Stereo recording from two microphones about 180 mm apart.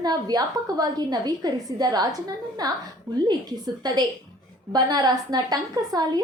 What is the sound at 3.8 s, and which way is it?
A woman's voice, 20° right (ahead or behind).